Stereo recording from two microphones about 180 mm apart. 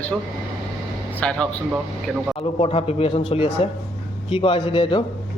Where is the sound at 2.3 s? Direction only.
30° left (ahead or behind).